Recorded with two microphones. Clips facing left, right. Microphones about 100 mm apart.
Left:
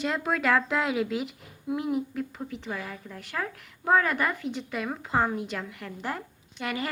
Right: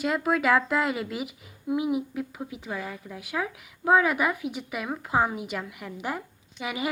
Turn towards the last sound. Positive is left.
turn(degrees=-10)  # may be behind; listen again after turning